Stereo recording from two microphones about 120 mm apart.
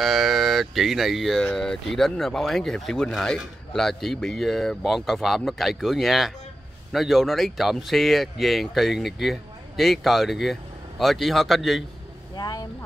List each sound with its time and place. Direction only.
0.0 s speech: centre (ahead or behind)
12.4 s speech: 35° left (ahead or behind)